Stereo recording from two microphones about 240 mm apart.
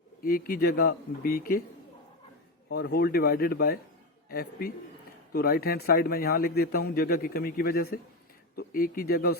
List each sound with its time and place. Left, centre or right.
0.2 s a man's voice: left
2.6 s a man's voice: left